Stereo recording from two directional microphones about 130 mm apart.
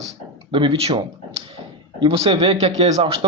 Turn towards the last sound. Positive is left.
turn(degrees=-55)  # may be behind; listen again after turning